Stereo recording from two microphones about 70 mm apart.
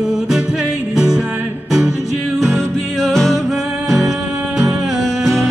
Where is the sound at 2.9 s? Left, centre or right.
Centre.